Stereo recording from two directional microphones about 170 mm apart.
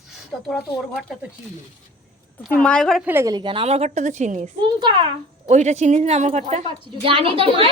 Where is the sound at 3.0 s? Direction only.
15° right (ahead or behind).